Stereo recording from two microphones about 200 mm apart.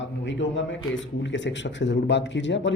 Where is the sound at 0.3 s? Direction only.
65° left (ahead or behind).